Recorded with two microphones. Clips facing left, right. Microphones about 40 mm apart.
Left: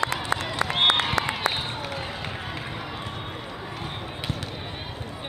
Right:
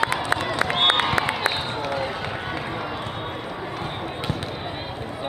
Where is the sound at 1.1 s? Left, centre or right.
Right.